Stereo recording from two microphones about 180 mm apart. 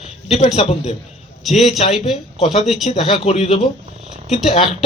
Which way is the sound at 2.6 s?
Centre (ahead or behind).